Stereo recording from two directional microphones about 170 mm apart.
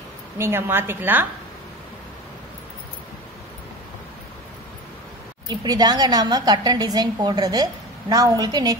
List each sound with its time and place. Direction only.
0.4 s a woman's voice: 15° right (ahead or behind)
5.5 s a woman's voice: 25° right (ahead or behind)